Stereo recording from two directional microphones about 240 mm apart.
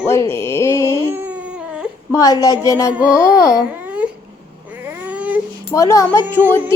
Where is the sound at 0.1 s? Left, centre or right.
Centre.